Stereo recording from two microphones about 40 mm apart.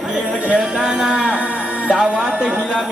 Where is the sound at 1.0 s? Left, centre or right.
Right.